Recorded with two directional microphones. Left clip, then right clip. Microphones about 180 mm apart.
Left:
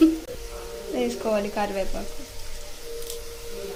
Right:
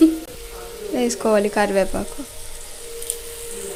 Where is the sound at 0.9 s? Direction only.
50° right (ahead or behind).